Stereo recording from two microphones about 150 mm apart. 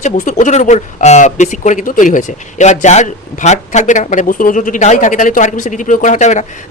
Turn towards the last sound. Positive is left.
turn(degrees=55)  # may be behind; listen again after turning